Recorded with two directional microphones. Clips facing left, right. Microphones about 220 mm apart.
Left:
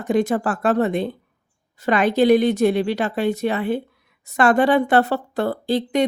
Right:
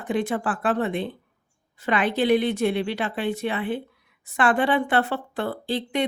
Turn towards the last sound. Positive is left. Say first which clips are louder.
# left 6 dB
turn(degrees=40)  # may be behind; listen again after turning